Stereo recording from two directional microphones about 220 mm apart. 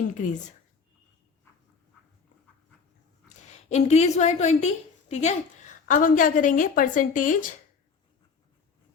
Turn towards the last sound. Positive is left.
turn(degrees=35)  # may be behind; listen again after turning